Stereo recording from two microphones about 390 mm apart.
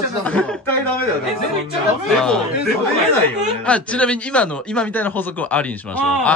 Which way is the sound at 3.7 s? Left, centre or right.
Centre.